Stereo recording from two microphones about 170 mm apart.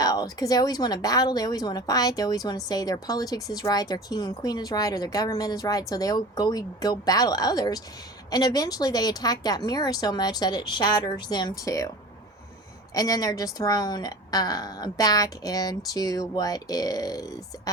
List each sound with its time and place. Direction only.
0.0 s speech: 20° left (ahead or behind)
12.9 s speech: 20° left (ahead or behind)